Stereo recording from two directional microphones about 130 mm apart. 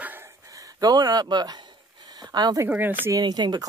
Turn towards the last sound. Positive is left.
turn(degrees=-30)  # may be behind; listen again after turning